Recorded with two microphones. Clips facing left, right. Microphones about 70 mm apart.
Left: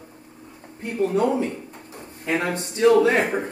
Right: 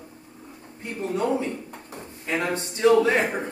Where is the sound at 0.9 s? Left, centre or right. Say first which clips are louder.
Left 5 dB; left.